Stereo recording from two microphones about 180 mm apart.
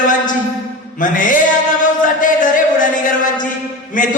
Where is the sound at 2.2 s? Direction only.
45° left (ahead or behind).